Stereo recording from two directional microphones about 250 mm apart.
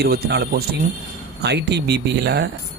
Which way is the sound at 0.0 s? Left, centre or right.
Right.